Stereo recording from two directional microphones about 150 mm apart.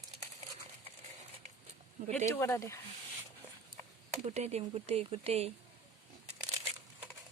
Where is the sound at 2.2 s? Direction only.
15° left (ahead or behind).